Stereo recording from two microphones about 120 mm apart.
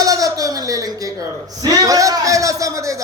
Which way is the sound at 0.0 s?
30° right (ahead or behind).